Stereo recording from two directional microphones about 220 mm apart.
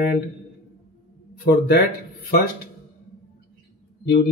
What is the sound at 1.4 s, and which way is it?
Speech, 45° left (ahead or behind).